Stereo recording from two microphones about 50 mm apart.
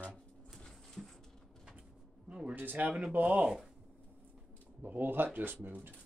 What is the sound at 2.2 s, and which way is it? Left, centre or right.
Speech, right.